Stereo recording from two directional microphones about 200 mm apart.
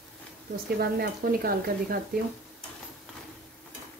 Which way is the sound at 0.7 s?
50° right (ahead or behind).